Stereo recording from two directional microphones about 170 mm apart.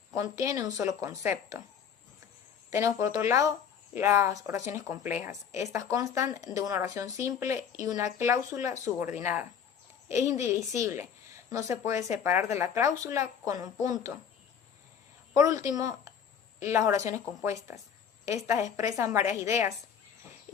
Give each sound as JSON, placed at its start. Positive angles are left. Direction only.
{"t": 0.1, "sound": "a woman's voice", "side_deg": -20}
{"t": 2.6, "sound": "a woman's voice", "side_deg": -20}
{"t": 15.4, "sound": "a woman's voice", "side_deg": -20}
{"t": 18.8, "sound": "a woman's voice", "side_deg": -20}